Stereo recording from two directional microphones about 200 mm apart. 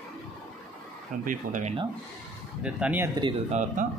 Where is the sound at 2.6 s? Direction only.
5° right (ahead or behind).